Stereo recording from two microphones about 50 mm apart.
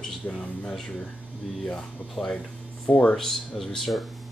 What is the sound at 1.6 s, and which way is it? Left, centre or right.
Speech, centre.